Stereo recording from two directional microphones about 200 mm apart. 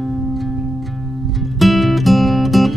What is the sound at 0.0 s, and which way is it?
Music, centre (ahead or behind).